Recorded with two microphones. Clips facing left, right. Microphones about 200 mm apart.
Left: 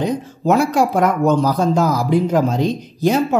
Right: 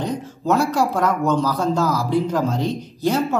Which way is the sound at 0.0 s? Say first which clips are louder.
Left 5 dB; 15° left (ahead or behind).